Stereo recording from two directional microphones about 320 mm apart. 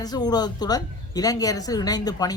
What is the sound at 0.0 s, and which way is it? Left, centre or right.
Speech, centre.